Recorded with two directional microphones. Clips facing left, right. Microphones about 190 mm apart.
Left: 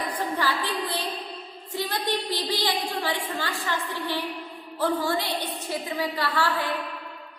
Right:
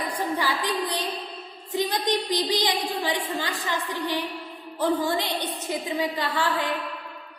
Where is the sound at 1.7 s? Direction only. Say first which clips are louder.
Right 3 dB; 15° right (ahead or behind).